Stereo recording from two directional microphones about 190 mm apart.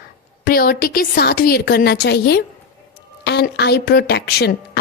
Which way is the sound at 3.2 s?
60° left (ahead or behind).